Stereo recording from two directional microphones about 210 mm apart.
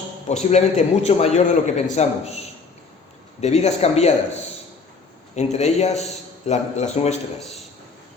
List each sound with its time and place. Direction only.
0.3 s a man's voice: 35° left (ahead or behind)
3.4 s a man's voice: 30° left (ahead or behind)
5.3 s a man's voice: 30° left (ahead or behind)